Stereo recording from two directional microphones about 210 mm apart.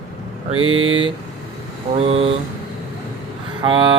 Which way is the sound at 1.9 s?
30° right (ahead or behind).